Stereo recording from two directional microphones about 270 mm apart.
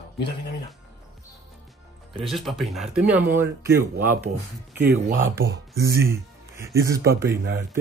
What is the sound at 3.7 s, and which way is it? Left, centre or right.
Speech, right.